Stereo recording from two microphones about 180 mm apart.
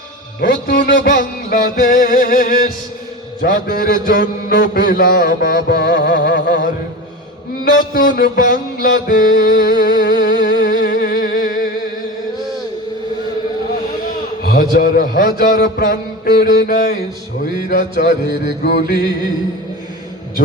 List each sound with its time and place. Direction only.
0.4 s music: 55° left (ahead or behind)
3.4 s mantra: 50° left (ahead or behind); by 6.6 s 70° left (ahead or behind)
7.6 s music: 50° left (ahead or behind)
10.2 s music: 50° left (ahead or behind)
14.4 s a man's voice: 55° left (ahead or behind)
15.4 s music: 50° left (ahead or behind)
17.7 s mantra: 65° left (ahead or behind)